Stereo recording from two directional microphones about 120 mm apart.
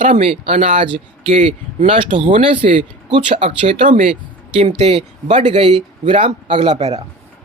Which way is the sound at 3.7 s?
90° right.